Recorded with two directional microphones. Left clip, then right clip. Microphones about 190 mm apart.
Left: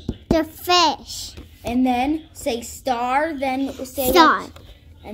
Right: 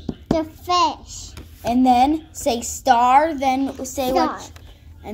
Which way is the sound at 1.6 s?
35° right (ahead or behind).